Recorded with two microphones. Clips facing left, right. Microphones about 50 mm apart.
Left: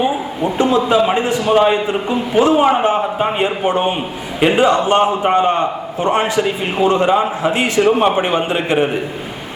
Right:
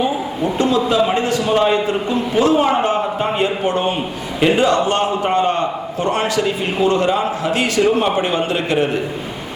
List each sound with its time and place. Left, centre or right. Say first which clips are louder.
0.0 s a man's voice: left 1 dB; left